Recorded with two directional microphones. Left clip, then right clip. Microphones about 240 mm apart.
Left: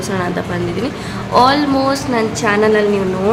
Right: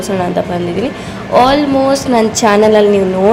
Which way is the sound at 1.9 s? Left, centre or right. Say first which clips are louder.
Right 5 dB; centre.